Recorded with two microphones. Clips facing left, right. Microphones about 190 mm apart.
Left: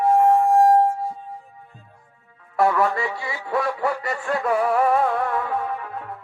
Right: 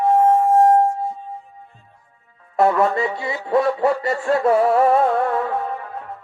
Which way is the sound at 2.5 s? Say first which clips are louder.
Right 3 dB; 25° right (ahead or behind).